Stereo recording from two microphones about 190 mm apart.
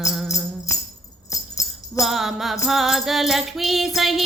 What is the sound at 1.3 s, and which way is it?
Jingle bell, 15° left (ahead or behind).